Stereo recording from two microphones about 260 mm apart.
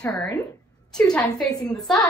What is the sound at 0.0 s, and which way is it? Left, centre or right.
A woman's voice, centre.